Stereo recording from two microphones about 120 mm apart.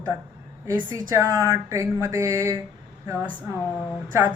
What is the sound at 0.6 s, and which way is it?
A woman's voice, 25° right (ahead or behind).